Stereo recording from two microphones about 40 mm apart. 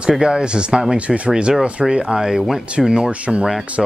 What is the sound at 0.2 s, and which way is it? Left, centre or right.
Speech, right.